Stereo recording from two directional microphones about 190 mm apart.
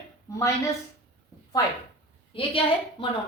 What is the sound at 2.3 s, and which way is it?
Speech, 30° left (ahead or behind).